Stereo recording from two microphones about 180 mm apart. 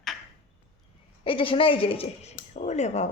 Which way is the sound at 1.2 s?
30° left (ahead or behind).